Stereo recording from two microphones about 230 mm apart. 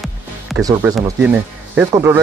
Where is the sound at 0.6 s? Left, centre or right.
Centre.